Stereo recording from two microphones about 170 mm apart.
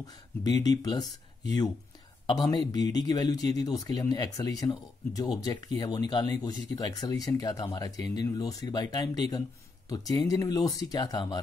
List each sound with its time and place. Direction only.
0.0 s speech: 20° left (ahead or behind)
2.2 s speech: 20° left (ahead or behind)